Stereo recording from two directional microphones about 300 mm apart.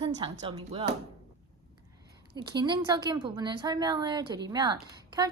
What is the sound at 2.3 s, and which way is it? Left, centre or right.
A woman's voice, centre.